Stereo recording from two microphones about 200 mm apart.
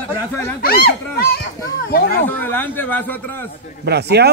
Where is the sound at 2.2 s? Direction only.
10° left (ahead or behind).